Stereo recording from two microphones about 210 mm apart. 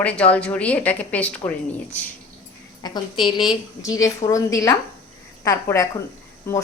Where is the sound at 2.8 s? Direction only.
20° left (ahead or behind).